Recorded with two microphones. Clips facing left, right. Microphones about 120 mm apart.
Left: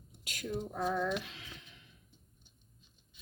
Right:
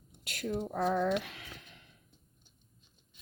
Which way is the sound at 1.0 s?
65° right (ahead or behind).